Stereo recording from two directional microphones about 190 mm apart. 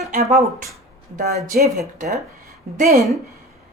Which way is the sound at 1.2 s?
50° right (ahead or behind).